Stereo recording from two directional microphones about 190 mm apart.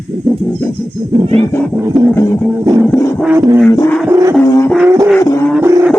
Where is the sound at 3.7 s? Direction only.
15° left (ahead or behind).